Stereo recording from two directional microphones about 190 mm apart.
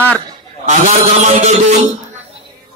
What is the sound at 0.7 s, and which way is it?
A man's voice, 40° right (ahead or behind).